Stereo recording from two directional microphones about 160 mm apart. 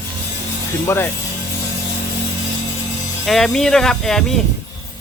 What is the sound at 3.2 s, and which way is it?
Speech, centre (ahead or behind).